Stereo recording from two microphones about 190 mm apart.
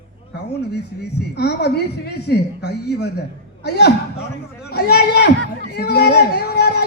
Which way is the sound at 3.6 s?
60° left (ahead or behind).